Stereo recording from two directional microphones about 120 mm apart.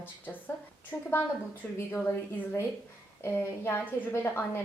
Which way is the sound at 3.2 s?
20° left (ahead or behind).